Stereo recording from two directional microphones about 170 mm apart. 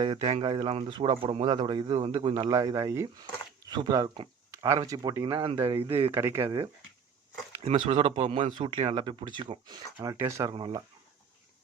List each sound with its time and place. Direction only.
0.0 s speech: 30° right (ahead or behind)
2.3 s speech: 20° right (ahead or behind)
6.1 s speech: 15° right (ahead or behind)
7.6 s speech: 35° right (ahead or behind)